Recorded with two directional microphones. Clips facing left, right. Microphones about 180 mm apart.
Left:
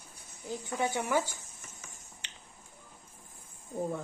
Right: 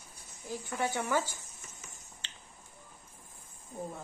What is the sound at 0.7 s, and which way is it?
Speech, 15° left (ahead or behind).